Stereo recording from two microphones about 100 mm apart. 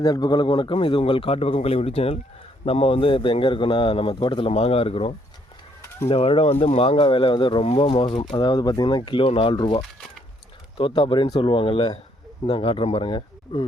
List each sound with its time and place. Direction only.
0.0 s a man's voice: 40° left (ahead or behind); by 2.1 s 90° left
2.6 s a man's voice: 70° left (ahead or behind); by 7.6 s 55° left (ahead or behind)
7.6 s a man's voice: 80° left; by 13.7 s 55° left (ahead or behind)